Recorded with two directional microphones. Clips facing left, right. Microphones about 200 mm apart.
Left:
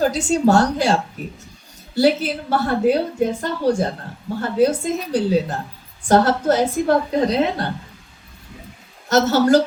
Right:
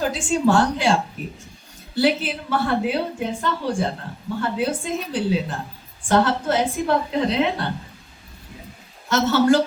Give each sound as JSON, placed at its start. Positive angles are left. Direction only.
{"t": 0.0, "sound": "a woman's voice", "side_deg": 40}
{"t": 9.0, "sound": "a woman's voice", "side_deg": 40}